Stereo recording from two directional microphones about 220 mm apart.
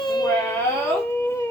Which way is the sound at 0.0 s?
20° left (ahead or behind).